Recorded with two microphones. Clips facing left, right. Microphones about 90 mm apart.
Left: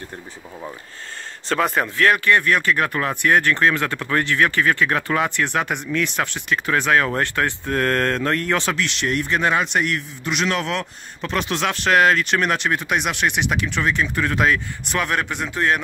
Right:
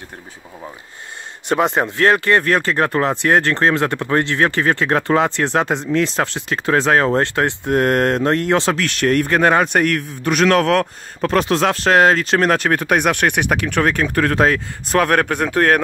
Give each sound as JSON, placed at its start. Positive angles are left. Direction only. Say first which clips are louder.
{"t": 1.5, "sound": "speech", "louder": "right 4 dB", "side_deg": -20}
{"t": 8.7, "sound": "a man's voice", "louder": "right 6 dB", "side_deg": -45}